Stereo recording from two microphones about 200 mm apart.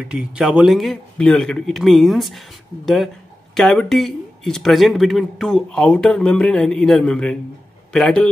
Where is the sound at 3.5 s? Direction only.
Centre (ahead or behind).